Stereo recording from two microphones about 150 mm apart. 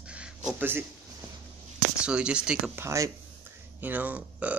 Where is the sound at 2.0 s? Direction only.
5° right (ahead or behind).